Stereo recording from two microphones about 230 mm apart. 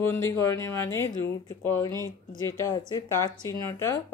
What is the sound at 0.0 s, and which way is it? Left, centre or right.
Speech, centre.